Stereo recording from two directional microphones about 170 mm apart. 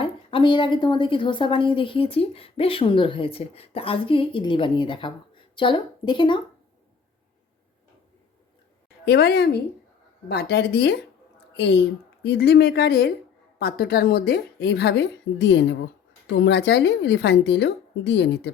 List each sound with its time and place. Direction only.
0.0 s a woman's voice: 30° left (ahead or behind)
9.0 s a woman's voice: 75° left (ahead or behind)
13.6 s a woman's voice: 60° left (ahead or behind); by 18.5 s 90° left